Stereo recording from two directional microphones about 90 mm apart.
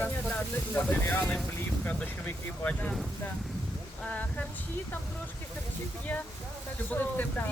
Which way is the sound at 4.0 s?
15° left (ahead or behind).